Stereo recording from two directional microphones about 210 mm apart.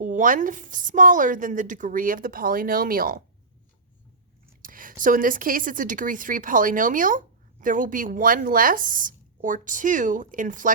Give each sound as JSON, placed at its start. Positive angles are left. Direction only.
{"t": 0.0, "sound": "a woman's voice", "side_deg": -40}
{"t": 4.6, "sound": "a woman's voice", "side_deg": -40}